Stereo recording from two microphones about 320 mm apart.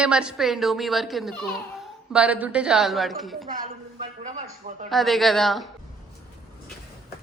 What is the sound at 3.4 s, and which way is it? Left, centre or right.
Speech, right.